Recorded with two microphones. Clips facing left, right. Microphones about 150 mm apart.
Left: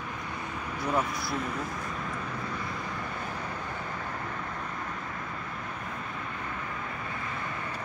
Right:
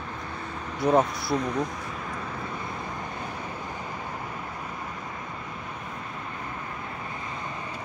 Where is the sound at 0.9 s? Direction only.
90° right.